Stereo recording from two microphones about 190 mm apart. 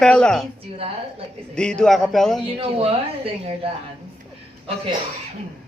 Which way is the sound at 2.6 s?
30° right (ahead or behind).